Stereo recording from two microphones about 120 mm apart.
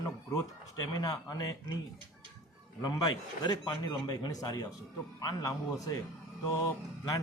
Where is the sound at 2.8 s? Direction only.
35° left (ahead or behind).